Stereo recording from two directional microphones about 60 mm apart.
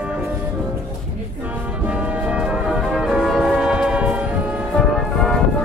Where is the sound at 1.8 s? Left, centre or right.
Right.